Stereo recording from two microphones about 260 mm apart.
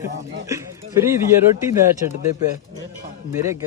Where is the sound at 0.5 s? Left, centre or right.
Centre.